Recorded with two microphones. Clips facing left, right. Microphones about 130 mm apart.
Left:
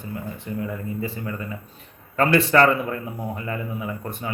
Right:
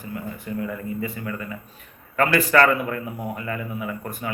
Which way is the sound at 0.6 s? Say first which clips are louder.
Left 1 dB; 25° left (ahead or behind).